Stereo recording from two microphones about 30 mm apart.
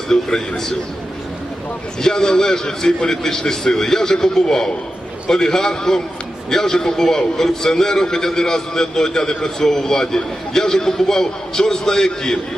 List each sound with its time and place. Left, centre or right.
0.1 s a man's voice: centre
2.0 s a man's voice: centre